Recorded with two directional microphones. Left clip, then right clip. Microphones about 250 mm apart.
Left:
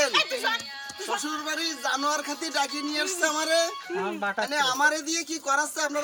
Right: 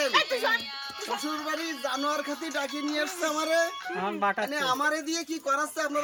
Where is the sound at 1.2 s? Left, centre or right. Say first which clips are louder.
Left 2 dB; centre.